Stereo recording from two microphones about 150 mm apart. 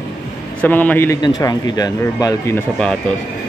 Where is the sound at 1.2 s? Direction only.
25° left (ahead or behind).